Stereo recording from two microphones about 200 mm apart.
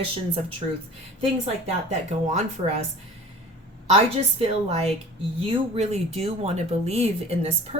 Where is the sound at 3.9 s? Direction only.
30° right (ahead or behind).